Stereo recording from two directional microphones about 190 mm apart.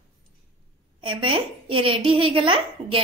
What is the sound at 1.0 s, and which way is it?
A child's voice, 25° right (ahead or behind).